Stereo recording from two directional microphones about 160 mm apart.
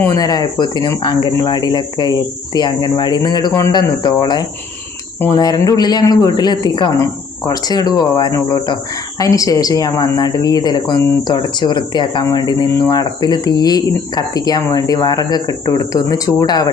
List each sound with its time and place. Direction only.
0.0 s speech: 20° left (ahead or behind)